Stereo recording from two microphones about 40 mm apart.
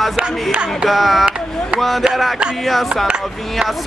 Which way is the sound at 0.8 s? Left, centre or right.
Centre.